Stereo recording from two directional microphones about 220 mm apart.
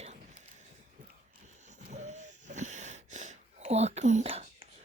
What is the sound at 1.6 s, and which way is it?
Wheeze, 30° right (ahead or behind).